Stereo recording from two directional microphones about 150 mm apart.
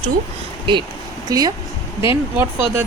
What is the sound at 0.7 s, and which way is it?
A woman's voice, 35° right (ahead or behind).